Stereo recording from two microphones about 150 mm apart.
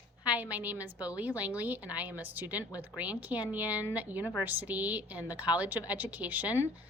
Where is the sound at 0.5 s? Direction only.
10° right (ahead or behind).